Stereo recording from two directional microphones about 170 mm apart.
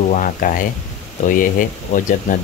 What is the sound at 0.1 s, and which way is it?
Speech, 50° left (ahead or behind).